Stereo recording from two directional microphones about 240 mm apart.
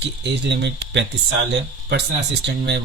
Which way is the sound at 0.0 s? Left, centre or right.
Right.